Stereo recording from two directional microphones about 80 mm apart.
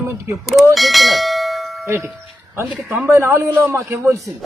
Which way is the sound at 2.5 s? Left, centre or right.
Right.